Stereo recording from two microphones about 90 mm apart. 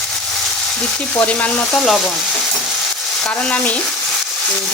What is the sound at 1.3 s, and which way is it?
Frying, 10° left (ahead or behind).